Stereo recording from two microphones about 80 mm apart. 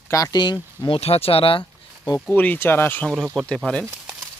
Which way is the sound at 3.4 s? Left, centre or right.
Centre.